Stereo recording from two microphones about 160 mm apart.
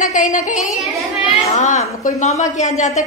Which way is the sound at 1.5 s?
50° left (ahead or behind).